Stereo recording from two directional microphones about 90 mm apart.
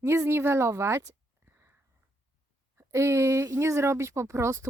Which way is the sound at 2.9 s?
30° right (ahead or behind).